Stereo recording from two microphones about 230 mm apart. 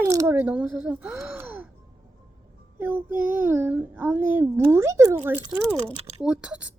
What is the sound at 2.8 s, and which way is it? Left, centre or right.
Speech, centre.